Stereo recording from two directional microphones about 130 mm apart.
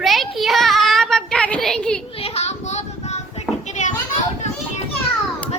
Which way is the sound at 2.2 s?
55° left (ahead or behind).